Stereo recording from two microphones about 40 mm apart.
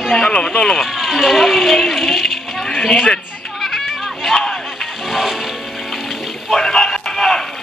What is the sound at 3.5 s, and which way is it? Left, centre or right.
Music, centre.